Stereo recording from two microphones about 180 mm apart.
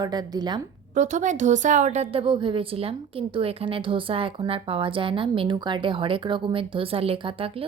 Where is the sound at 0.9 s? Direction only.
40° right (ahead or behind).